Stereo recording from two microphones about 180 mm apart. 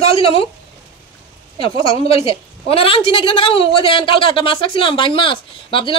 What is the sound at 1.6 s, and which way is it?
A woman's voice, 30° left (ahead or behind).